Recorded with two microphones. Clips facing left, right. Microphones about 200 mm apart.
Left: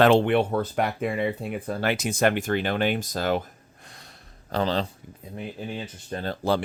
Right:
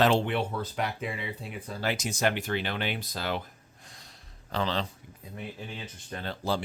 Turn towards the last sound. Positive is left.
turn(degrees=40)  # may be behind; listen again after turning